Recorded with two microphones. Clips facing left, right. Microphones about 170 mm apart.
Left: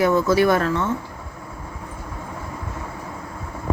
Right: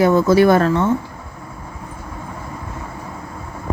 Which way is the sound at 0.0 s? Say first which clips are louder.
Right 5 dB; 30° right (ahead or behind).